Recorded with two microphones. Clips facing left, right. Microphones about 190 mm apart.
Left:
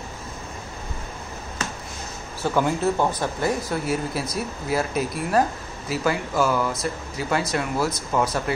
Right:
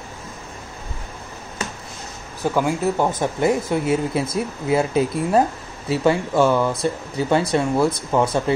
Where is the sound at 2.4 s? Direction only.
15° right (ahead or behind).